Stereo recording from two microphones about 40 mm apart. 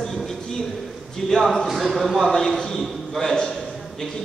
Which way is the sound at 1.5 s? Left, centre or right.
Centre.